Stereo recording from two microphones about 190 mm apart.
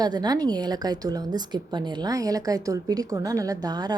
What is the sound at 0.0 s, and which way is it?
A woman's voice, 20° right (ahead or behind).